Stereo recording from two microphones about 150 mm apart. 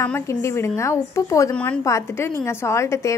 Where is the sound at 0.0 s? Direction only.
15° left (ahead or behind).